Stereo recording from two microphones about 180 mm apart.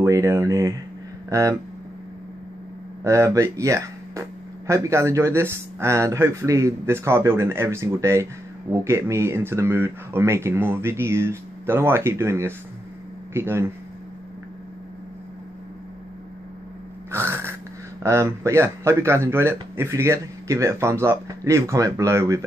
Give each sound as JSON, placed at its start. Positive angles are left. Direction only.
{"t": 0.0, "sound": "a man's voice", "side_deg": -15}
{"t": 3.0, "sound": "a man's voice", "side_deg": -15}
{"t": 17.1, "sound": "a sound", "side_deg": -15}
{"t": 18.0, "sound": "a man's voice", "side_deg": -15}